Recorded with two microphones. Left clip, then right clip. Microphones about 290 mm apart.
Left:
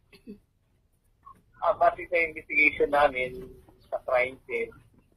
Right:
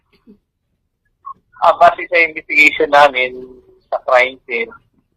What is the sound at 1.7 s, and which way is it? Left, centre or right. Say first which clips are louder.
Speech: right 13 dB; right.